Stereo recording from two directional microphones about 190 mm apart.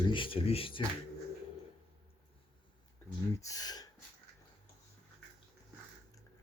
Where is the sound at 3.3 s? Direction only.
20° left (ahead or behind).